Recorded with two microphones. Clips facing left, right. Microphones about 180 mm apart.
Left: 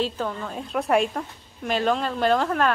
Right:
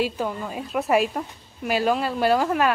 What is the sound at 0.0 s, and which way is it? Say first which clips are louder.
A woman's voice: right 1 dB; 10° right (ahead or behind).